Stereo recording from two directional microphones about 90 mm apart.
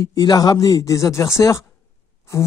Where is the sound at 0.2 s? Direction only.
50° left (ahead or behind).